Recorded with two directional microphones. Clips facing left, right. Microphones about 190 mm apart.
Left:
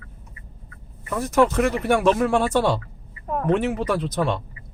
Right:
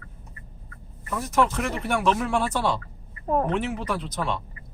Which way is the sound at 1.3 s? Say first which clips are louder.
Left 6 dB; 50° left (ahead or behind).